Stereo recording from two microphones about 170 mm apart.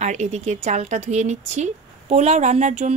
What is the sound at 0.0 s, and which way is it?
Speech, 45° right (ahead or behind).